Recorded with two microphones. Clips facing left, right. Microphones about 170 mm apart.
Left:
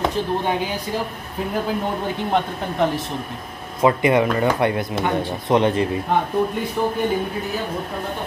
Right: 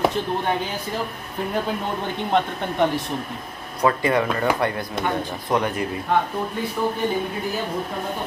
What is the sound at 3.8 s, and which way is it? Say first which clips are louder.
Speech: left 3 dB; 20° left (ahead or behind).